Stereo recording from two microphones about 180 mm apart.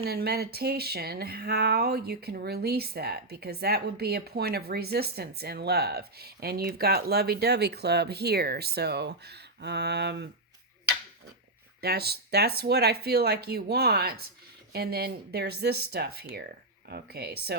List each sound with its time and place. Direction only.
0.0 s speech: 60° right (ahead or behind)
11.8 s speech: 60° right (ahead or behind)